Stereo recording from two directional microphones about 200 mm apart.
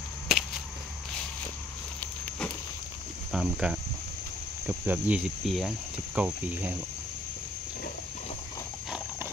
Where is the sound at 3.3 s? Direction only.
5° right (ahead or behind).